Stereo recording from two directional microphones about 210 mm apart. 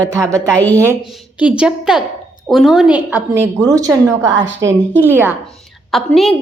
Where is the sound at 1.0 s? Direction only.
Centre (ahead or behind).